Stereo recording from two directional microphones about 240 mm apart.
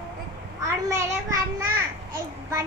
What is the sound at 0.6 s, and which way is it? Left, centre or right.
Speech, centre.